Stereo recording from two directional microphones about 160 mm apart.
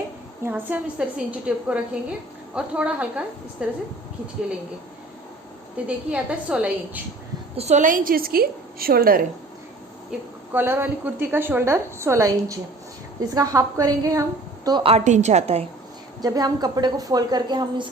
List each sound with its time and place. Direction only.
0.4 s a woman's voice: 10° right (ahead or behind)
5.7 s a woman's voice: 5° right (ahead or behind)
7.5 s a woman's voice: 45° right (ahead or behind); by 9.2 s 65° right (ahead or behind)
10.1 s a woman's voice: 15° right (ahead or behind)
14.8 s a woman's voice: 45° right (ahead or behind)
16.2 s a woman's voice: 25° right (ahead or behind)